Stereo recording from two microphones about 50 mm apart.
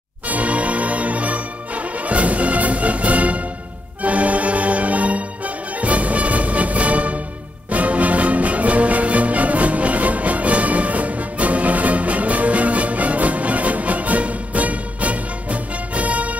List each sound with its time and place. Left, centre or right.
0.3 s music: right